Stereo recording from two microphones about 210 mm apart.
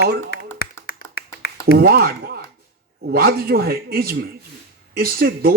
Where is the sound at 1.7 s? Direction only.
45° right (ahead or behind).